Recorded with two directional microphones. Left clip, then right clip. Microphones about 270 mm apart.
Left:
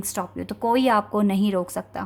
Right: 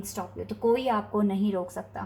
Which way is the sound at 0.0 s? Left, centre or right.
Left.